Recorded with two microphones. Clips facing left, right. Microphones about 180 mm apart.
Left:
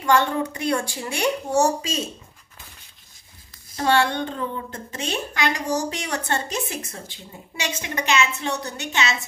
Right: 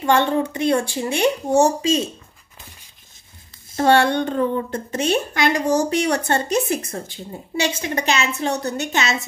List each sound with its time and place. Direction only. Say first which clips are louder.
0.0 s a woman's voice: right 3 dB; 25° right (ahead or behind)
3.7 s a woman's voice: right 5 dB; 50° right (ahead or behind)
7.5 s a woman's voice: right 6 dB; 35° right (ahead or behind)